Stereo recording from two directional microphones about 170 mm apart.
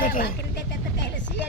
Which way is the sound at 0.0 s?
55° left (ahead or behind).